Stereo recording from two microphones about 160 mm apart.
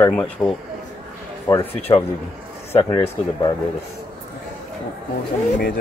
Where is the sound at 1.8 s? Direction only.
40° left (ahead or behind).